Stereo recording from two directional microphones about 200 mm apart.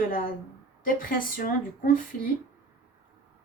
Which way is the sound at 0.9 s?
45° left (ahead or behind).